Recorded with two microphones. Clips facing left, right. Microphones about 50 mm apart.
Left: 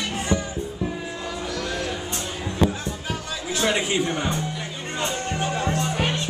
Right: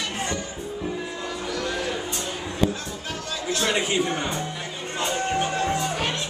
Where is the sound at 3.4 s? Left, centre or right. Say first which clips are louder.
Left 1 dB; centre.